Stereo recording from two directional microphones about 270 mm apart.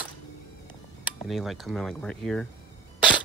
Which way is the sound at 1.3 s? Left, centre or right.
Centre.